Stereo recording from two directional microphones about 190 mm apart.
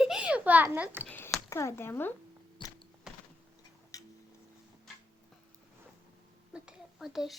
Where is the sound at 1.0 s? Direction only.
5° left (ahead or behind).